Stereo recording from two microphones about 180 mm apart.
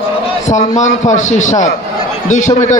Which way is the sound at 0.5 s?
40° left (ahead or behind).